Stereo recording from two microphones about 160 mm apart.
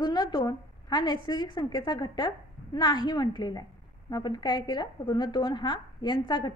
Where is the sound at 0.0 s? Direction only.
25° left (ahead or behind).